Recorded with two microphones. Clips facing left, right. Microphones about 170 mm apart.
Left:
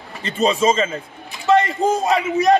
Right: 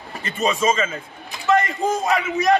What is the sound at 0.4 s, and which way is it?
A man's voice, 35° left (ahead or behind).